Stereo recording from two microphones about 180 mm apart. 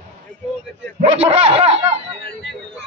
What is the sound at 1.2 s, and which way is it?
Speech, 35° right (ahead or behind).